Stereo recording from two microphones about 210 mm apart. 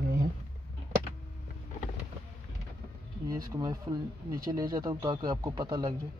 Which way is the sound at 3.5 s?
20° right (ahead or behind).